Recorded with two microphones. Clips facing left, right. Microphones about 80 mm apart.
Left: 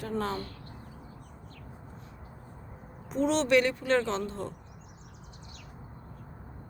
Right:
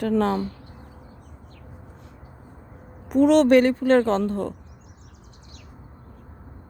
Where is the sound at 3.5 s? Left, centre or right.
Right.